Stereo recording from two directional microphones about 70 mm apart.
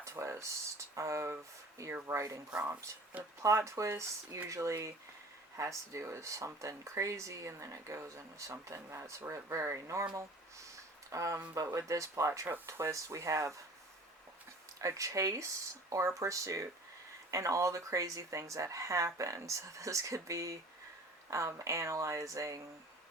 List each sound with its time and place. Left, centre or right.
0.0 s speech: right
3.4 s speech: right
11.1 s speech: right
14.8 s speech: right